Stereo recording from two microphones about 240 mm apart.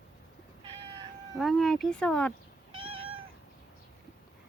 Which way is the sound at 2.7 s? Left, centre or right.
Right.